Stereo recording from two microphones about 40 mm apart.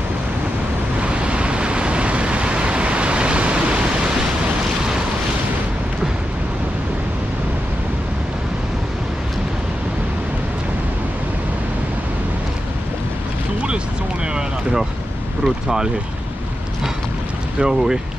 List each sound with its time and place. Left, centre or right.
1.0 s vehicle: right
14.3 s boat: centre
17.6 s speech: centre